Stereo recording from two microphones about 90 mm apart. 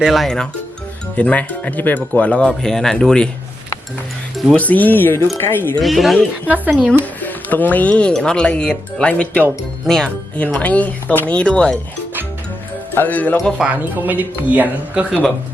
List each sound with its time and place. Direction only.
0.0 s speech: centre (ahead or behind)
1.1 s speech: 15° left (ahead or behind)
4.5 s speech: 15° left (ahead or behind)
5.8 s speech: centre (ahead or behind)
6.7 s speech: 10° right (ahead or behind)
7.0 s speech: 20° left (ahead or behind)
10.3 s speech: 15° left (ahead or behind)
12.9 s speech: 20° left (ahead or behind)
13.6 s speech: 5° right (ahead or behind)
13.9 s speech: 20° right (ahead or behind)